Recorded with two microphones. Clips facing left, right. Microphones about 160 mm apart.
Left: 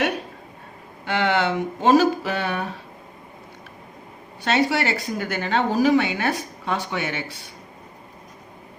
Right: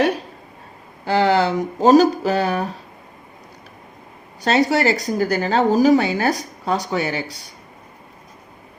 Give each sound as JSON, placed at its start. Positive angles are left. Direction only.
{"t": 1.0, "sound": "speech", "side_deg": -35}
{"t": 4.4, "sound": "speech", "side_deg": -40}